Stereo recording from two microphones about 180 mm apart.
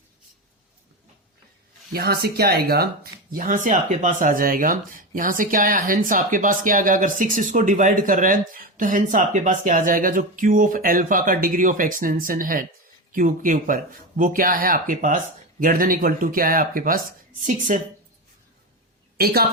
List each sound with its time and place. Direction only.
1.9 s speech: 60° right (ahead or behind)
19.1 s a woman's voice: 60° right (ahead or behind)